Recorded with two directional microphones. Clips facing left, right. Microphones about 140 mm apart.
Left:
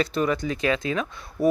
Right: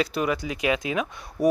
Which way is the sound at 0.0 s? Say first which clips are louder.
Left 1 dB; 10° right (ahead or behind).